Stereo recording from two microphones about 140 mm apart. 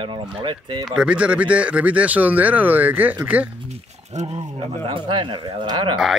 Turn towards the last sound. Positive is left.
turn(degrees=-35)  # may be behind; listen again after turning